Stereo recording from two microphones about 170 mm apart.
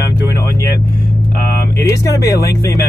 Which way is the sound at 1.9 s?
20° left (ahead or behind).